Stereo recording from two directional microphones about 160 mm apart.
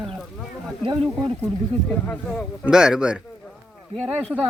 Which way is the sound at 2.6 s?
5° right (ahead or behind).